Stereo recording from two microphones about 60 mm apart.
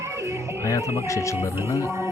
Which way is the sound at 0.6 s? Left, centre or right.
Left.